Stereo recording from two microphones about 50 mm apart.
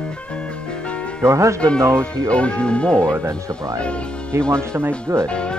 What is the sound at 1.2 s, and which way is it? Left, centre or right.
Speech, right.